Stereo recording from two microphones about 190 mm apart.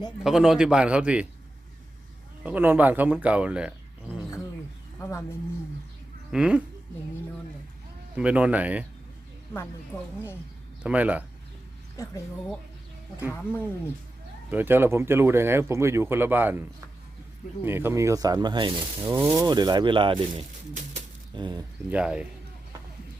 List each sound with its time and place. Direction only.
0.2 s a man's voice: centre (ahead or behind)
2.4 s speech: 10° right (ahead or behind)
4.9 s a sound: 10° left (ahead or behind)
6.3 s a man's voice: 5° right (ahead or behind)
8.1 s speech: 5° right (ahead or behind)
9.5 s speech: 10° left (ahead or behind)
10.8 s speech: 5° right (ahead or behind)
11.9 s speech: 15° left (ahead or behind)
14.5 s speech: 10° right (ahead or behind)
21.8 s a man's voice: 5° right (ahead or behind)